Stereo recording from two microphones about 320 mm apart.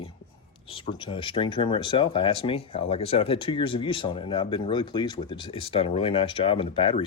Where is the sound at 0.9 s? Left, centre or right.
Centre.